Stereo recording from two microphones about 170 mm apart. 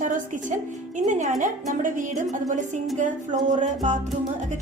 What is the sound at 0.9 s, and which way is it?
A woman's voice, 45° right (ahead or behind).